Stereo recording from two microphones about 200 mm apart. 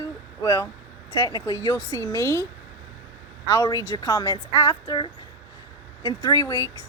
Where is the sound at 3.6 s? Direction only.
15° left (ahead or behind).